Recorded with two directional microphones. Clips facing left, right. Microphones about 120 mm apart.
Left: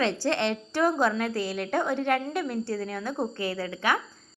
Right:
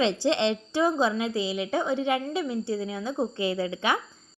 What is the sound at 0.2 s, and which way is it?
A woman's voice, 20° right (ahead or behind).